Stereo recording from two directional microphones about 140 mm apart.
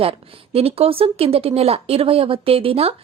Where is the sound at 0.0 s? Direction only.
45° right (ahead or behind).